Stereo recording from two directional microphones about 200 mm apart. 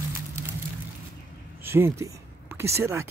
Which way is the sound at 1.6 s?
10° right (ahead or behind).